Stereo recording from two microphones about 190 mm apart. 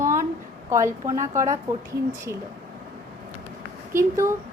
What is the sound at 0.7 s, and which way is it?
A woman's voice, 15° right (ahead or behind).